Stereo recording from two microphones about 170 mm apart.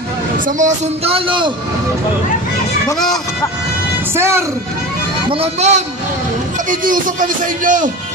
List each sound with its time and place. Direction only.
0.5 s speech: 45° right (ahead or behind); by 1.5 s 30° right (ahead or behind)
4.1 s speech: 15° right (ahead or behind)
5.3 s speech: 40° right (ahead or behind)
6.7 s speech: 50° right (ahead or behind)